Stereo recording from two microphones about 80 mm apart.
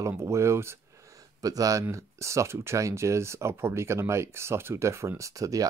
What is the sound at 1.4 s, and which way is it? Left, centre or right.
Speech, right.